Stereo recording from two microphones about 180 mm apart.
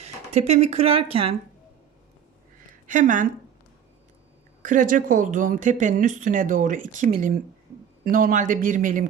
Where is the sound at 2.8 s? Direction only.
45° right (ahead or behind).